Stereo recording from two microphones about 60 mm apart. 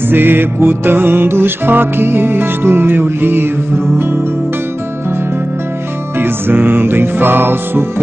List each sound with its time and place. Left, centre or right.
0.1 s music: right
6.1 s music: right